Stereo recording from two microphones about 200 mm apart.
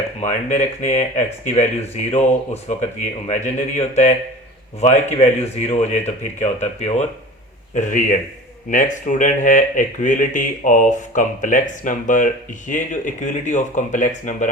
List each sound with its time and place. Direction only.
0.2 s speech: 35° left (ahead or behind)